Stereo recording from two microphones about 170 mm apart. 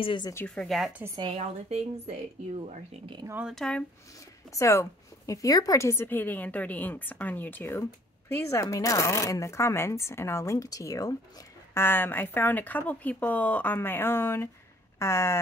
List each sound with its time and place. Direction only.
0.0 s speech: 30° left (ahead or behind)
0.3 s speech: 15° left (ahead or behind)
0.7 s a woman's voice: centre (ahead or behind)
1.0 s a woman's voice: 25° right (ahead or behind)
1.3 s speech: 40° right (ahead or behind)
3.3 s speech: 10° right (ahead or behind)
3.5 s a woman's voice: 5° left (ahead or behind)
4.5 s speech: 15° left (ahead or behind)